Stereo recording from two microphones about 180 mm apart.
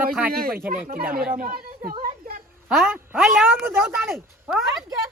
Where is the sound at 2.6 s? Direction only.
Centre (ahead or behind).